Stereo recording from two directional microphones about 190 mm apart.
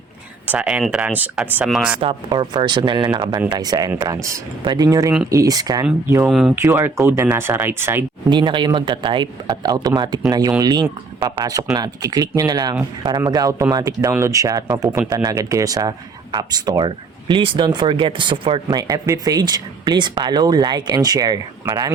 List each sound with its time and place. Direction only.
0.4 s speech: 5° right (ahead or behind)
2.0 s speech: 25° right (ahead or behind)
6.2 s speech: centre (ahead or behind)
6.7 s speech: 15° right (ahead or behind)
8.3 s speech: 25° right (ahead or behind); by 15.1 s 10° right (ahead or behind)
15.1 s speech: 20° right (ahead or behind)
21.7 s speech: 10° right (ahead or behind)